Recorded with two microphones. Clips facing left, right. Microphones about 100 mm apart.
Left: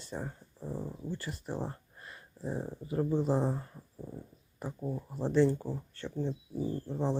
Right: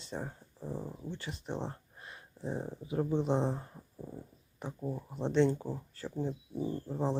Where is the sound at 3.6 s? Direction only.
15° right (ahead or behind).